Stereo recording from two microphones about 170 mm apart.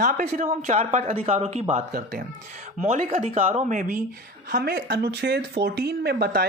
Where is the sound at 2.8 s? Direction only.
40° right (ahead or behind).